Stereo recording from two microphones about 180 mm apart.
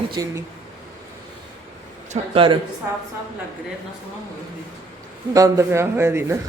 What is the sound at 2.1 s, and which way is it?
Speech, 30° right (ahead or behind).